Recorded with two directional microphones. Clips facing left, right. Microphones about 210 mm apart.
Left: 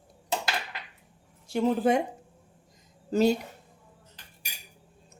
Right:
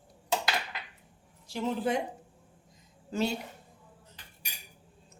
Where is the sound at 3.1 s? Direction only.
40° left (ahead or behind).